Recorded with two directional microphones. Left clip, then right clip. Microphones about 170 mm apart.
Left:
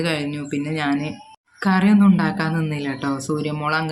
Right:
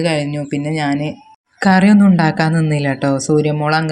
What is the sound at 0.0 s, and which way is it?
Speech, 25° right (ahead or behind).